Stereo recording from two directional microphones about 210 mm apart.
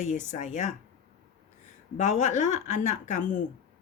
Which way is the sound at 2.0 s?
35° left (ahead or behind).